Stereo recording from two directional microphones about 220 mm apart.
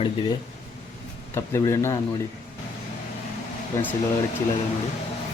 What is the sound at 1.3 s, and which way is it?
Speech, 10° left (ahead or behind).